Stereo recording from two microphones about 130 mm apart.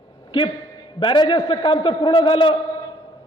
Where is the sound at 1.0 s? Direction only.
40° left (ahead or behind).